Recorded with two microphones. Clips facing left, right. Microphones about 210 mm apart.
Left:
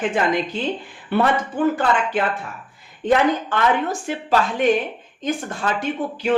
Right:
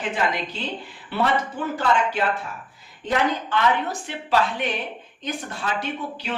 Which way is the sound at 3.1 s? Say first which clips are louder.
Left 5 dB; 45° left (ahead or behind).